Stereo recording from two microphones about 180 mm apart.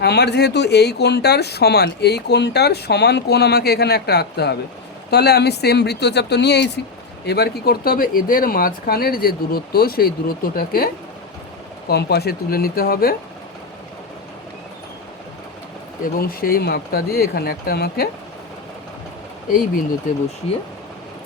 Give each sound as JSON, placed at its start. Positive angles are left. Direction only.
{"t": 0.0, "sound": "speech", "side_deg": 65}
{"t": 11.9, "sound": "speech", "side_deg": 65}
{"t": 16.1, "sound": "speech", "side_deg": 55}